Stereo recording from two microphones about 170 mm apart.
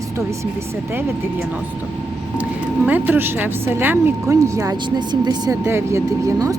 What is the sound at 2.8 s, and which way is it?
Speech, 10° right (ahead or behind).